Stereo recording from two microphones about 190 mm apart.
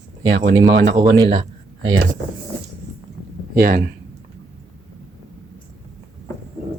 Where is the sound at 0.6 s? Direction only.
70° right (ahead or behind).